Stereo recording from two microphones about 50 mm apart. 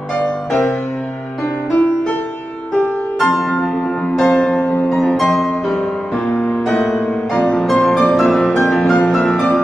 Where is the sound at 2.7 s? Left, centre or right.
Left.